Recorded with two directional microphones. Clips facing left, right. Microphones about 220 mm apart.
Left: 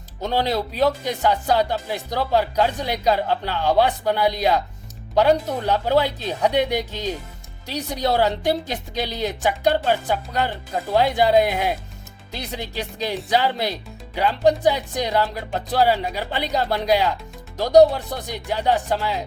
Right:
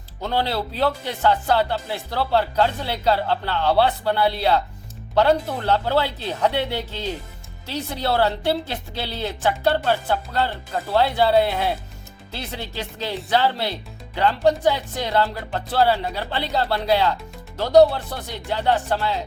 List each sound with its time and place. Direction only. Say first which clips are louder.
0.2 s speech: left 2 dB; 15° left (ahead or behind)